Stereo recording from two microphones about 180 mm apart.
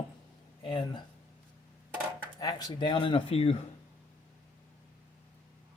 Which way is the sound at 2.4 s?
20° left (ahead or behind).